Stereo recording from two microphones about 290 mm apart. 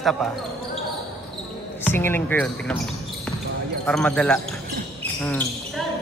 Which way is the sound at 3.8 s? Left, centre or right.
Centre.